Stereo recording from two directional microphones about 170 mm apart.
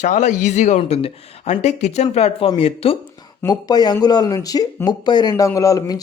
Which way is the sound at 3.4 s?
25° left (ahead or behind).